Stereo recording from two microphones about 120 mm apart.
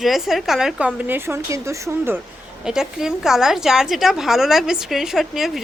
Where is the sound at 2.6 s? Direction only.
5° right (ahead or behind).